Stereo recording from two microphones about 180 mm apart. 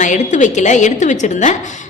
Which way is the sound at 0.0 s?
45° left (ahead or behind).